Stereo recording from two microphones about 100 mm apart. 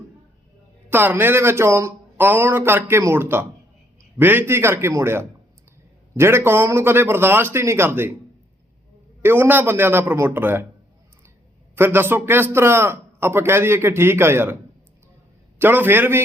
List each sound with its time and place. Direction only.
0.9 s a man's voice: 20° right (ahead or behind)
9.2 s a man's voice: 20° right (ahead or behind)
11.7 s a man's voice: 25° right (ahead or behind)
15.5 s a man's voice: 20° right (ahead or behind)